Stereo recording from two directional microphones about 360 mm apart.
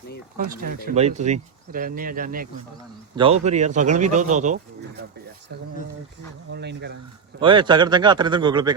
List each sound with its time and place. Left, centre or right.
0.3 s speech: right
6.5 s speech: right
7.3 s speech: centre